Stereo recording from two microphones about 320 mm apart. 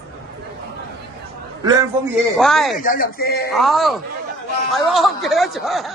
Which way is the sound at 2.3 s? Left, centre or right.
Centre.